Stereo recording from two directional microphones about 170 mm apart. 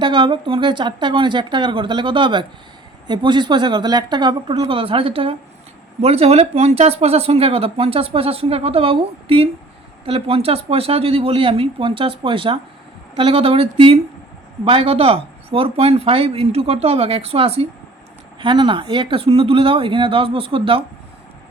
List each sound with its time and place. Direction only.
0.0 s a woman's voice: 30° right (ahead or behind)